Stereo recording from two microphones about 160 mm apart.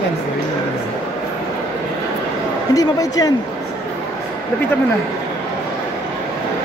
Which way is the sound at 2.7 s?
25° left (ahead or behind).